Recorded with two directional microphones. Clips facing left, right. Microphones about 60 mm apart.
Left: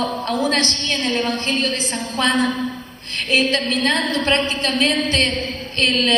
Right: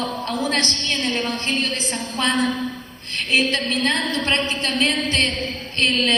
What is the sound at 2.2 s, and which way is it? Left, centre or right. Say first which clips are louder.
Speech: left 2 dB; left.